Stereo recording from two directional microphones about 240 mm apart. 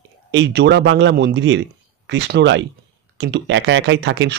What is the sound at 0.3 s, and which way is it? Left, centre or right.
A man's voice, right.